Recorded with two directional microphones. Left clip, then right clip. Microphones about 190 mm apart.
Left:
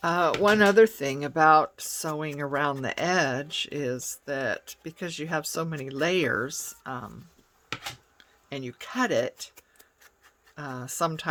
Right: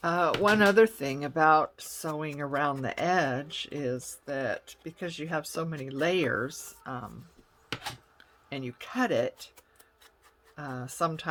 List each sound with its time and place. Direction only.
0.0 s speech: 25° left (ahead or behind)
8.2 s speech: 20° left (ahead or behind)